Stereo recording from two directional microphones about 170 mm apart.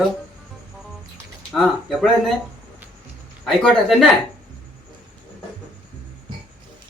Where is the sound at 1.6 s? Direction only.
Centre (ahead or behind).